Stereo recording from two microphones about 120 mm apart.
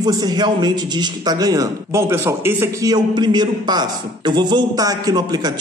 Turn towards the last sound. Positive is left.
turn(degrees=-35)  # may be behind; listen again after turning